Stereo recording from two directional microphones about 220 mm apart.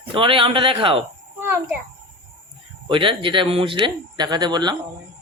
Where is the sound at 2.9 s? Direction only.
25° right (ahead or behind).